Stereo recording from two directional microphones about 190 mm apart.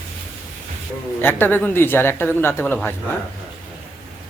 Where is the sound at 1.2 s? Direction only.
10° left (ahead or behind).